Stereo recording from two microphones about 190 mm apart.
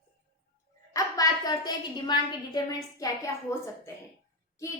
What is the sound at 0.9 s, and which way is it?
A woman's voice, 20° left (ahead or behind).